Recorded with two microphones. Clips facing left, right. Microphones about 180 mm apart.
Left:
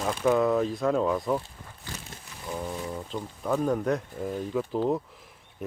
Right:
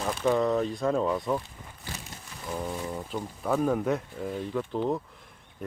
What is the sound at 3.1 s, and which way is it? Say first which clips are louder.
Speech: even; centre (ahead or behind).